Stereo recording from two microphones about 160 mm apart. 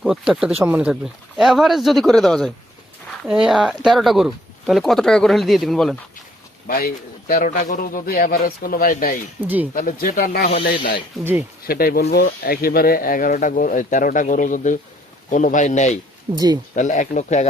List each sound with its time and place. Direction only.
0.0 s speech: 5° right (ahead or behind)
6.7 s speech: 65° left (ahead or behind)
9.4 s speech: 15° right (ahead or behind)
9.7 s speech: 60° left (ahead or behind)
11.2 s speech: 15° right (ahead or behind)
11.6 s speech: 70° left (ahead or behind); by 16.0 s 45° left (ahead or behind)
16.3 s speech: 25° right (ahead or behind)
16.7 s speech: 50° left (ahead or behind)